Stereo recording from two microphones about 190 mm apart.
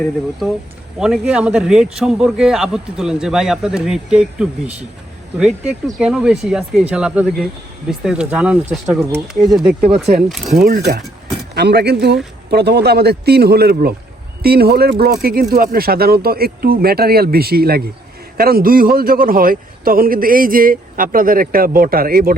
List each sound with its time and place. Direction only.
0.9 s a man's voice: 5° right (ahead or behind)
10.7 s a man's voice: 55° right (ahead or behind)